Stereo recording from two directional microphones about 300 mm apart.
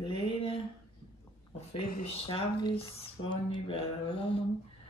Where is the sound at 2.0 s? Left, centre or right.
Centre.